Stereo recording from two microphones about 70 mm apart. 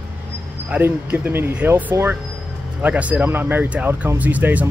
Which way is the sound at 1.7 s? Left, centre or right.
Right.